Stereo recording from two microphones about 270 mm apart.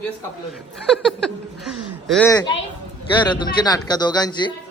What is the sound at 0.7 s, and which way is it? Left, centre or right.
A man's voice, centre.